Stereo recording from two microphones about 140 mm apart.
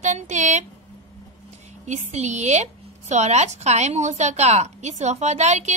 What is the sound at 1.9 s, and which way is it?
A woman's voice, 55° right (ahead or behind).